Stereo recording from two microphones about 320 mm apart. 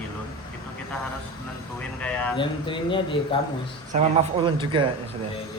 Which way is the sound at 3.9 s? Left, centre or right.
Right.